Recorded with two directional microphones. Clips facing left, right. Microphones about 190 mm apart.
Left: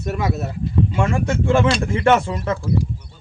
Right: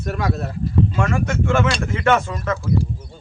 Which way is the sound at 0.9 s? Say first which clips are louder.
Left 1 dB; 25° left (ahead or behind).